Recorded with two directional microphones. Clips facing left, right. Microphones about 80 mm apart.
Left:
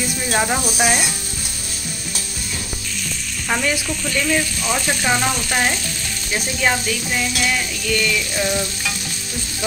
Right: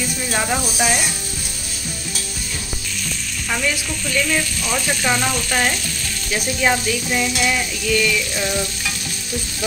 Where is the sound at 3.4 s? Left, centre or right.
Left.